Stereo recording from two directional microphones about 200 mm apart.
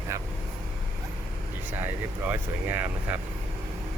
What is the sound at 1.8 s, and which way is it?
Speech, 10° right (ahead or behind).